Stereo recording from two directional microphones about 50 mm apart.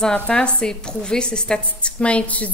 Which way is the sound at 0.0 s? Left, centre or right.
Centre.